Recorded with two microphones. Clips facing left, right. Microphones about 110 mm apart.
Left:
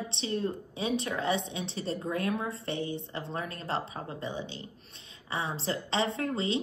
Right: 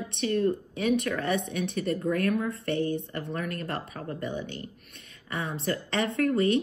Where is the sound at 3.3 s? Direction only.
25° left (ahead or behind).